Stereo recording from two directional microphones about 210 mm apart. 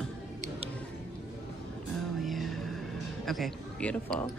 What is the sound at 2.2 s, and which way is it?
Music, centre (ahead or behind).